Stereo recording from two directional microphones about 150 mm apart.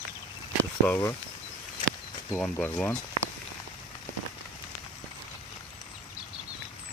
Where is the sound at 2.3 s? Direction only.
10° left (ahead or behind).